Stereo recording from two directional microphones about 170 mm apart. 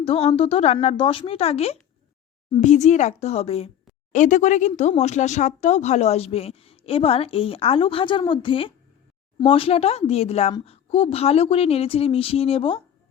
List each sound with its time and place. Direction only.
0.0 s speech: 35° left (ahead or behind)
4.1 s speech: 45° left (ahead or behind)